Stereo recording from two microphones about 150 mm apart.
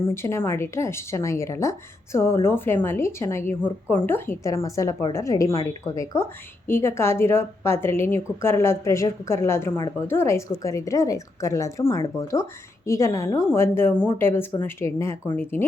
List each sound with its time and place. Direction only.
0.1 s a woman's voice: 15° left (ahead or behind)